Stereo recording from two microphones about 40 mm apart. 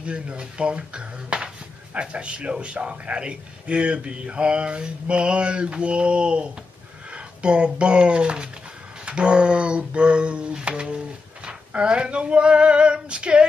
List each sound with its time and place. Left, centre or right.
0.0 s a man's voice: right
9.0 s a sound: right
11.4 s a man's voice: right